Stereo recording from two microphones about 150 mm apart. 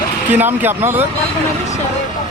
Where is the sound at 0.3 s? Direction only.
10° right (ahead or behind).